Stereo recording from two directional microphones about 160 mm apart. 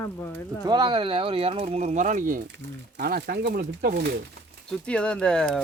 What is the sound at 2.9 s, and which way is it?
Speech, 80° right.